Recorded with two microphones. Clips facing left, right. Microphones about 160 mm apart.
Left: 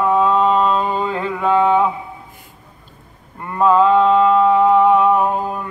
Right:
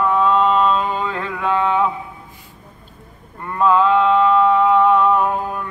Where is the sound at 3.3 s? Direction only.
15° left (ahead or behind).